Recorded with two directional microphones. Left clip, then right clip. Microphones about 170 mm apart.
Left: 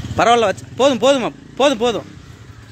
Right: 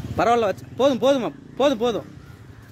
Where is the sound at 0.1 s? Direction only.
Centre (ahead or behind).